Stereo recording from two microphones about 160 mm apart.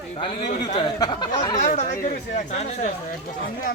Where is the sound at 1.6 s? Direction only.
55° left (ahead or behind).